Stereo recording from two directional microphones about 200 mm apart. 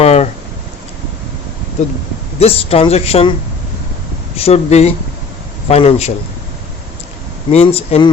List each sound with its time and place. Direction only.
0.0 s a sound: 30° left (ahead or behind)
1.8 s speech: 35° left (ahead or behind)
4.4 s speech: 30° left (ahead or behind)
7.5 s speech: 30° left (ahead or behind)